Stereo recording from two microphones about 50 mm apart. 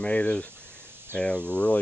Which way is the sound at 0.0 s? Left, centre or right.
Left.